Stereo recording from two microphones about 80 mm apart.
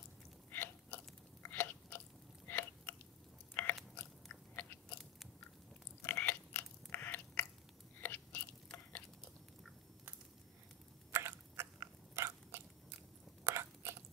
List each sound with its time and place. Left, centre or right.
0.5 s chewing: left
2.4 s a sound: left
3.6 s biting: left
6.0 s biting: left
8.0 s chewing: left
11.1 s biting: right
13.4 s chewing: right